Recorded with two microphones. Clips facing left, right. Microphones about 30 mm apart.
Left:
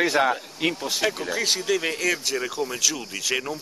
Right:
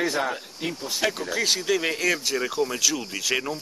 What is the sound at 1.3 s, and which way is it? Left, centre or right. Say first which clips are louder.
Speech: even; centre.